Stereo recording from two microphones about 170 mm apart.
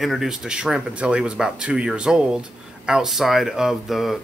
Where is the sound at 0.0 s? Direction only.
Centre (ahead or behind).